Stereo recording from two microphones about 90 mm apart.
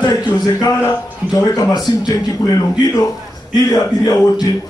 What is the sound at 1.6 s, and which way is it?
Speech, 45° left (ahead or behind).